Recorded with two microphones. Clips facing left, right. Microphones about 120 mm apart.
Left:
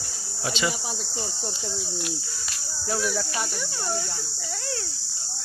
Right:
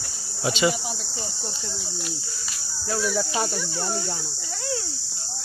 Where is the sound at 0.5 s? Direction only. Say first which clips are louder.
Right 5 dB; 10° right (ahead or behind).